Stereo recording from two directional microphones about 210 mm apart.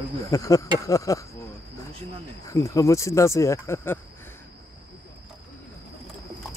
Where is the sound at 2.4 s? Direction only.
15° left (ahead or behind).